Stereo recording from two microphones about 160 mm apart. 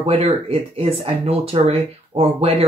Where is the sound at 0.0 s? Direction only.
40° right (ahead or behind).